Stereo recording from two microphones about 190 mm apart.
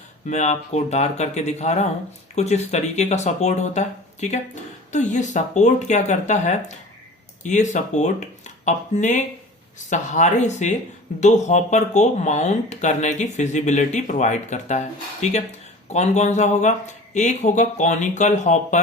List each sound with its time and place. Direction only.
0.3 s speech: 40° left (ahead or behind)